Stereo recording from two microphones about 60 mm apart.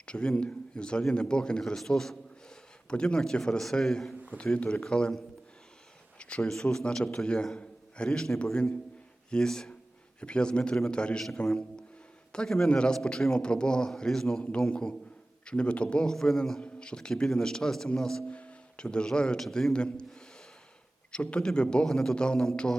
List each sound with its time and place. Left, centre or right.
0.0 s a man's voice: centre
6.1 s a man's voice: centre
18.3 s a man's voice: centre